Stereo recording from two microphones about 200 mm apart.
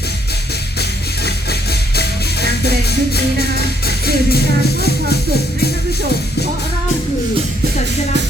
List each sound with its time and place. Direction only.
0.8 s music: 55° left (ahead or behind)
3.8 s music: 50° left (ahead or behind)